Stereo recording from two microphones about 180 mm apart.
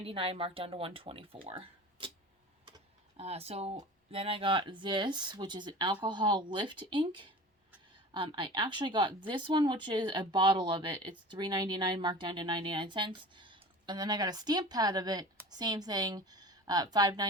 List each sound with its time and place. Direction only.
0.0 s speech: 30° right (ahead or behind)
3.2 s speech: 35° right (ahead or behind)